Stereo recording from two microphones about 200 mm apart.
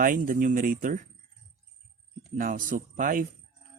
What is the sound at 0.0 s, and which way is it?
Speech, 40° right (ahead or behind).